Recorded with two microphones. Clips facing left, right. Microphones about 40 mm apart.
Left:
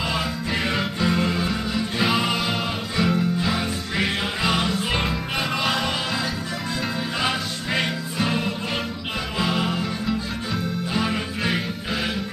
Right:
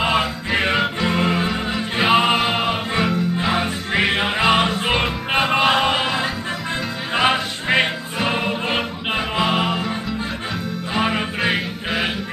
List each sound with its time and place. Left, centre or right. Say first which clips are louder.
0.0 s music: right 6 dB; right
10.9 s music: right 6 dB; right